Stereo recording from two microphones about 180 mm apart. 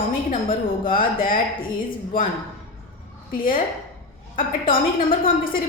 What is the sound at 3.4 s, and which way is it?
Speech, 50° left (ahead or behind).